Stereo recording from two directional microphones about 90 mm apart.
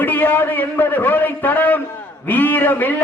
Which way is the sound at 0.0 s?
20° left (ahead or behind).